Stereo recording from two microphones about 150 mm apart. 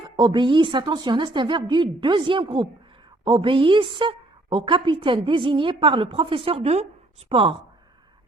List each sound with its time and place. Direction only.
0.0 s a woman's voice: 30° right (ahead or behind)